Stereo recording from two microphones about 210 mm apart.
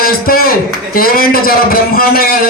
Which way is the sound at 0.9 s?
45° left (ahead or behind).